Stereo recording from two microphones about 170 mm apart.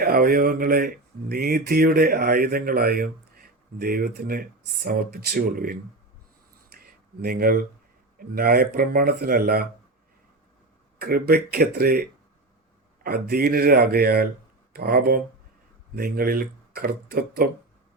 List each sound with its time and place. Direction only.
0.0 s speech: 60° right (ahead or behind)
6.7 s a sound: 60° right (ahead or behind)
8.2 s speech: 60° right (ahead or behind)
10.9 s speech: 65° right (ahead or behind)